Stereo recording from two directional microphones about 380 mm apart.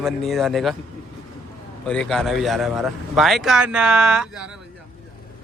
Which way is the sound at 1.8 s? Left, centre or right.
Centre.